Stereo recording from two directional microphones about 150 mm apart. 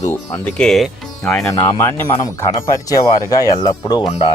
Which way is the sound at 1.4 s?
25° left (ahead or behind).